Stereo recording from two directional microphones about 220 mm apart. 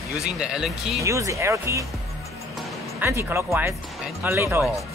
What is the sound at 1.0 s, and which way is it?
Speech, 15° right (ahead or behind).